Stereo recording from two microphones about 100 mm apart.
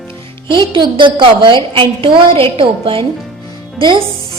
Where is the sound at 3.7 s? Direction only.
50° right (ahead or behind).